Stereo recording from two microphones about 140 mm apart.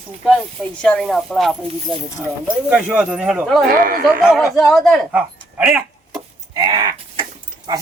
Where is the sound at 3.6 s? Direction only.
90° right.